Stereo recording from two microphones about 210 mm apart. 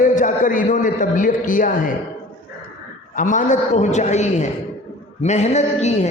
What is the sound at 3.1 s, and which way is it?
A man's voice, 40° left (ahead or behind).